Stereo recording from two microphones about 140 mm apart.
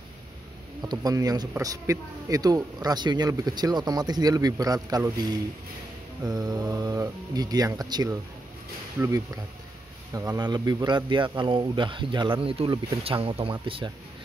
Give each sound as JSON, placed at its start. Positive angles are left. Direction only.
{"t": 0.8, "sound": "speech", "side_deg": -25}
{"t": 6.2, "sound": "speech", "side_deg": -25}